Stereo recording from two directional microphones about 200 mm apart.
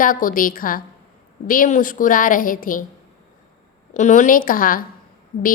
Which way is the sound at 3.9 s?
40° left (ahead or behind).